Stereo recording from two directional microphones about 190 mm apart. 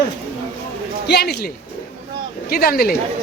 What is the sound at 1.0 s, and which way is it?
Speech, 60° left (ahead or behind).